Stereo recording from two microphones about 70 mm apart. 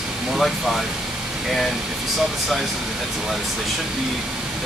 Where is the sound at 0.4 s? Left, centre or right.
Centre.